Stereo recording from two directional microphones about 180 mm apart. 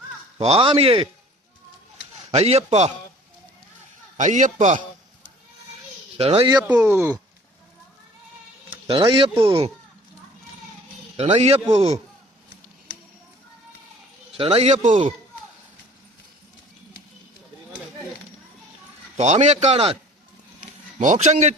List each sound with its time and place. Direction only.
0.3 s a man's voice: 35° right (ahead or behind)
2.3 s a man's voice: 35° right (ahead or behind)
4.2 s a man's voice: 45° right (ahead or behind)
6.1 s a man's voice: 35° right (ahead or behind)
6.6 s speech: 10° right (ahead or behind)
8.9 s a man's voice: 30° right (ahead or behind)
11.2 s a man's voice: 35° right (ahead or behind)
14.3 s a man's voice: 30° right (ahead or behind)
19.1 s a man's voice: 40° right (ahead or behind)
21.0 s a man's voice: 40° right (ahead or behind)